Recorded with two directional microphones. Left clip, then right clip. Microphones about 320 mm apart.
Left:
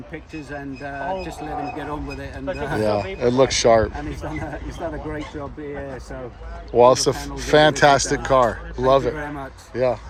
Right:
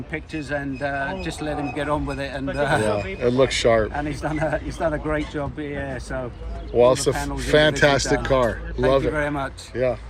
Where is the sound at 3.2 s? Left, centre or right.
Centre.